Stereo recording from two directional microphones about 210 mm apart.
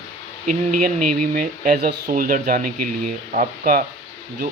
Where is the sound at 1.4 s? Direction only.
40° right (ahead or behind).